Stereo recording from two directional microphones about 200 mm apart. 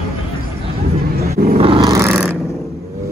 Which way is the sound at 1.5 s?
25° right (ahead or behind).